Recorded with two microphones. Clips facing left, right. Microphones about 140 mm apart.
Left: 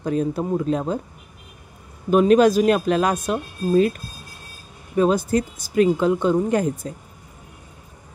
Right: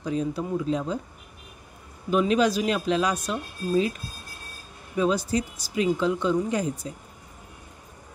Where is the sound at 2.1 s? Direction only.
50° left (ahead or behind).